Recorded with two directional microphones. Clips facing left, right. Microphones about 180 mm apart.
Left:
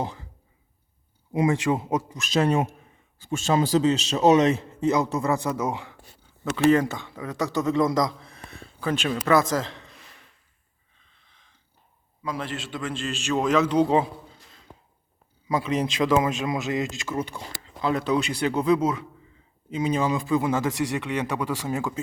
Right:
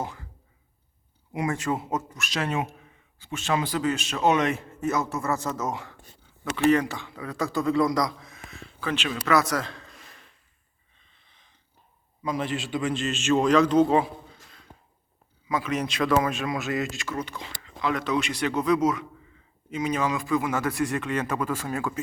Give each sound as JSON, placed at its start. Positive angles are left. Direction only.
{"t": 1.3, "sound": "a man's voice", "side_deg": 20}
{"t": 2.3, "sound": "a man's voice", "side_deg": 30}
{"t": 3.2, "sound": "speech", "side_deg": 45}
{"t": 3.5, "sound": "a man's voice", "side_deg": 30}
{"t": 4.3, "sound": "speech", "side_deg": 35}
{"t": 4.8, "sound": "a man's voice", "side_deg": 15}
{"t": 8.4, "sound": "a sound", "side_deg": 35}
{"t": 9.2, "sound": "a man's voice", "side_deg": 25}
{"t": 12.2, "sound": "a man's voice", "side_deg": 0}
{"t": 15.4, "sound": "a man's voice", "side_deg": 30}
{"t": 17.3, "sound": "a man's voice", "side_deg": 30}
{"t": 20.9, "sound": "a man's voice", "side_deg": 15}